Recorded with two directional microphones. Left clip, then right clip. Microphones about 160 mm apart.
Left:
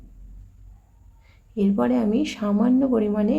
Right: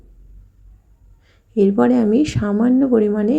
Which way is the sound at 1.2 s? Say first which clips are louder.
Right 9 dB; 25° right (ahead or behind).